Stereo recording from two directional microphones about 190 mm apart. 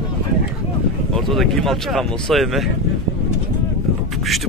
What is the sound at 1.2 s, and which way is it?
Speech, centre (ahead or behind).